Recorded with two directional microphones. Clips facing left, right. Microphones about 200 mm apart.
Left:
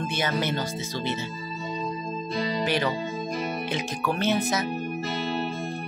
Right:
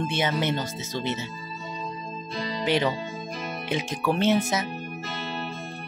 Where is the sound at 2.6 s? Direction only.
20° right (ahead or behind).